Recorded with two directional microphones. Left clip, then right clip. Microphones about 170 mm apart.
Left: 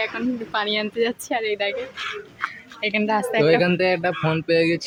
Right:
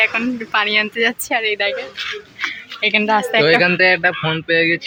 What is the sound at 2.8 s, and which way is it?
Speech, 35° right (ahead or behind).